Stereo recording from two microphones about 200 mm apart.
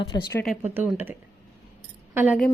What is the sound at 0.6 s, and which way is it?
A woman's voice, 10° right (ahead or behind).